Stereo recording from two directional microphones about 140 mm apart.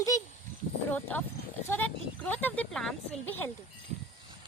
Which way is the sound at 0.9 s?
10° left (ahead or behind).